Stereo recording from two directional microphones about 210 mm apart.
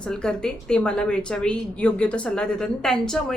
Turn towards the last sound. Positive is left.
turn(degrees=5)  # may be behind; listen again after turning